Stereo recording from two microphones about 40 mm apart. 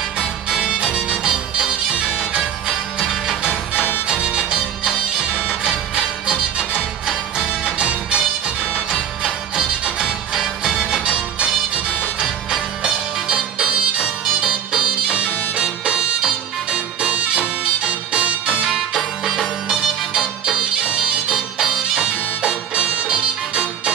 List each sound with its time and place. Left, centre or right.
0.2 s music: centre
4.5 s bagpipes: right
6.2 s music: right
9.8 s music: centre
17.8 s music: right
18.7 s music: centre